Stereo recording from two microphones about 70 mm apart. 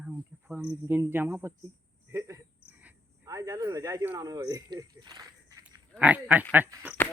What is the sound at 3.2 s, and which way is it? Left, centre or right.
Speech, right.